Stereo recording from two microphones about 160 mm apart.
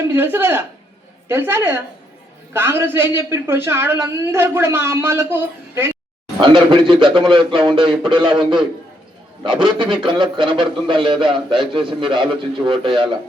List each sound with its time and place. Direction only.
0.0 s a man's voice: 15° right (ahead or behind)
6.4 s a man's voice: 30° right (ahead or behind)